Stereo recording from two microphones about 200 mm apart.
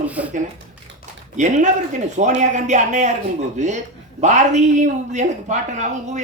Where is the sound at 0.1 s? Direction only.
5° right (ahead or behind).